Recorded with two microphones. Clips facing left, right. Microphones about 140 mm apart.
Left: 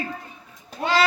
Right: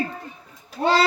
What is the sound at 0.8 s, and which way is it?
Speech, 35° right (ahead or behind).